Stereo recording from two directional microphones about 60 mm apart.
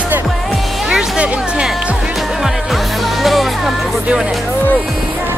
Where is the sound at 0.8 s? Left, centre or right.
Centre.